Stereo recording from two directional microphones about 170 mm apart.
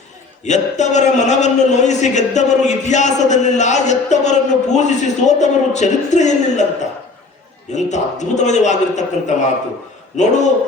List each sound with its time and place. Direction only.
0.4 s a man's voice: 45° left (ahead or behind)
7.7 s a man's voice: 45° left (ahead or behind)